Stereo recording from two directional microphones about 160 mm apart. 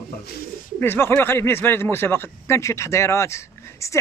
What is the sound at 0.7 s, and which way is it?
Speech, 15° left (ahead or behind).